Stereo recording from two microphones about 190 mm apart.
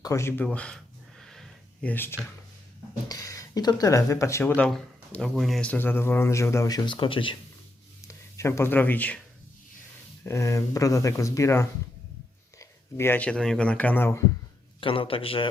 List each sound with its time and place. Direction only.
0.0 s speech: 15° left (ahead or behind)
1.2 s a sound: centre (ahead or behind)
3.1 s speech: 20° left (ahead or behind)
8.0 s speech: 15° left (ahead or behind)
10.2 s speech: 15° left (ahead or behind)
14.8 s a man's voice: 30° left (ahead or behind)